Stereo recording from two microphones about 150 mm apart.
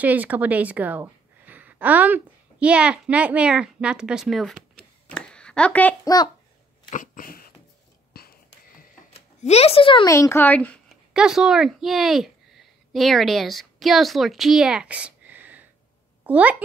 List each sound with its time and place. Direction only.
0.0 s a woman's voice: 10° right (ahead or behind); by 5.9 s 10° left (ahead or behind)
6.0 s a child's voice: 25° left (ahead or behind)
6.9 s dog: 65° left (ahead or behind)
8.1 s a sound: 90° left
9.1 s speech: 45° left (ahead or behind)
10.0 s speech: 20° left (ahead or behind)
11.1 s a woman's voice: 5° right (ahead or behind)